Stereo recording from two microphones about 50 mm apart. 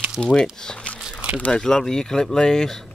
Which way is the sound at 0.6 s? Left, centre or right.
Centre.